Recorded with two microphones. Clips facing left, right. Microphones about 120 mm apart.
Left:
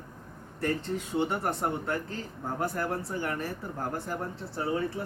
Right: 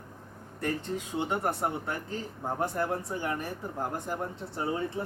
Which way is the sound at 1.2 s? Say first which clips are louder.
Even; 15° right (ahead or behind).